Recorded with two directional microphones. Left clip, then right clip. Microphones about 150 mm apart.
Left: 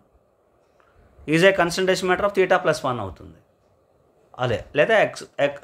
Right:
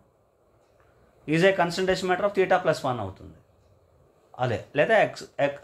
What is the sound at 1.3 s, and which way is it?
Speech, 40° left (ahead or behind).